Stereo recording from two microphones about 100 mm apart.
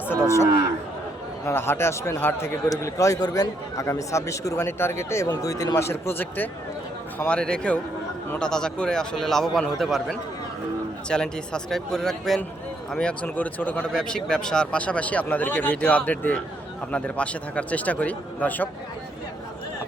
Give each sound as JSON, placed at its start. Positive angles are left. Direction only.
{"t": 1.5, "sound": "a man's voice", "side_deg": 25}
{"t": 7.3, "sound": "speech", "side_deg": 10}